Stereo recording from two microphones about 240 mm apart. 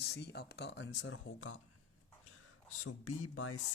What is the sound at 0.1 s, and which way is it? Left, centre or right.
Speech, left.